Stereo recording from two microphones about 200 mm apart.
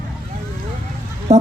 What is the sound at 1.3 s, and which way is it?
Speech, 35° right (ahead or behind).